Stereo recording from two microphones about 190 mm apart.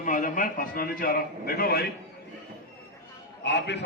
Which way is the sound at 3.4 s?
65° left (ahead or behind).